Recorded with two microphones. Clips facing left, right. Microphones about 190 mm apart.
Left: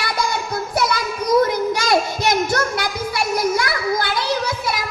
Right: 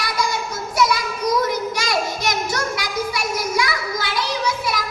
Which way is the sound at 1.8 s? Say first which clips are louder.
Left 6 dB; 55° left (ahead or behind).